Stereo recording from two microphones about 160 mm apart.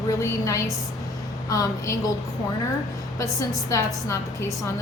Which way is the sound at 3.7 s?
20° left (ahead or behind).